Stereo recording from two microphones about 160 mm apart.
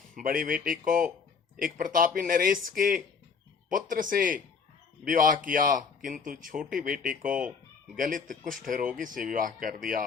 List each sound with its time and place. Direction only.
0.1 s speech: 60° right (ahead or behind)